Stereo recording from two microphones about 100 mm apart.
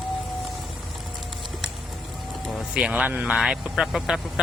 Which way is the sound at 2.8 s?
10° right (ahead or behind).